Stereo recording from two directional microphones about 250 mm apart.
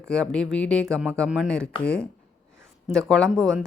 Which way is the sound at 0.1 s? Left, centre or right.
Centre.